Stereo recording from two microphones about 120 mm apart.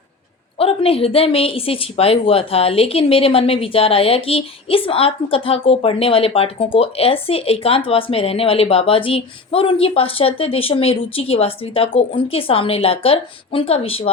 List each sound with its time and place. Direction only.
0.6 s a woman's voice: 50° left (ahead or behind)